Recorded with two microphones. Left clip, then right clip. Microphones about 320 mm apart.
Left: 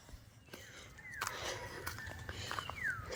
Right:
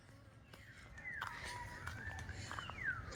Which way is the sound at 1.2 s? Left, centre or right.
Left.